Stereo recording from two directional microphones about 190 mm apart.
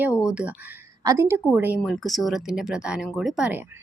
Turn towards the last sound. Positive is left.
turn(degrees=-5)  # may be behind; listen again after turning